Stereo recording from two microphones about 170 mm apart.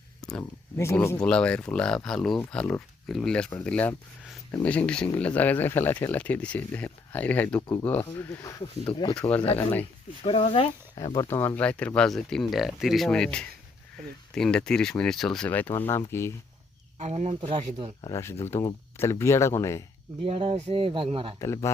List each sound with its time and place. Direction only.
0.2 s a sound: 5° left (ahead or behind)
0.8 s speech: 15° left (ahead or behind)
9.1 s speech: 10° left (ahead or behind)
10.2 s speech: 35° left (ahead or behind)
11.3 s speech: 10° left (ahead or behind)
17.0 s speech: 40° right (ahead or behind)
18.0 s speech: 15° left (ahead or behind)
20.2 s speech: 35° right (ahead or behind)
21.3 s speech: 15° left (ahead or behind)